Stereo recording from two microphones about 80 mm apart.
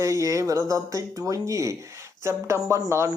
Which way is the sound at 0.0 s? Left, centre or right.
Right.